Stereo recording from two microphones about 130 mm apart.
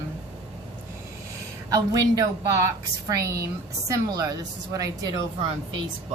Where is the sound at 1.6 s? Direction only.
25° right (ahead or behind).